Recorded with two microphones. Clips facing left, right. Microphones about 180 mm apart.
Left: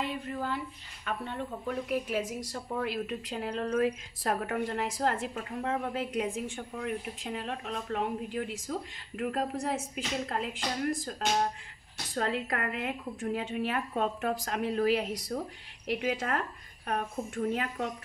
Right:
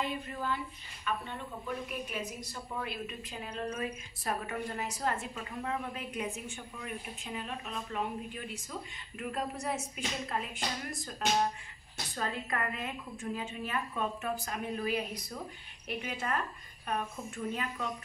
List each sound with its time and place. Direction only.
0.0 s a woman's voice: 70° left (ahead or behind)
1.9 s a woman's voice: 90° left
6.5 s a woman's voice: 65° left (ahead or behind); by 8.7 s 80° left
9.2 s a woman's voice: 60° left (ahead or behind)
12.2 s a woman's voice: 75° left (ahead or behind)